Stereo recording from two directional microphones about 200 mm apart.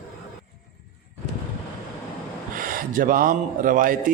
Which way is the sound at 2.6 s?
45° right (ahead or behind).